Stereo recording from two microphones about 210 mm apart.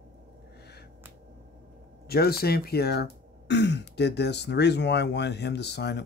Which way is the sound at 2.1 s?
45° left (ahead or behind).